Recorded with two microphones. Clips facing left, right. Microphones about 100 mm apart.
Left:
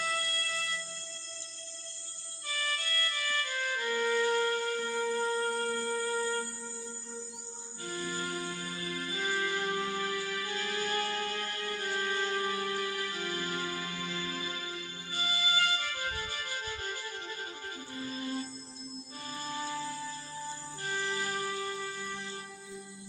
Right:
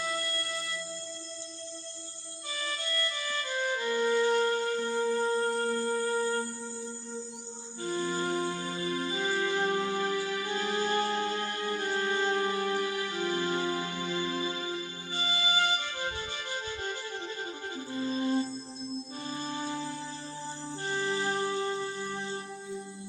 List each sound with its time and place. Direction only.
0.0 s music: 15° right (ahead or behind)
2.5 s music: 20° right (ahead or behind)
7.8 s music: 25° right (ahead or behind)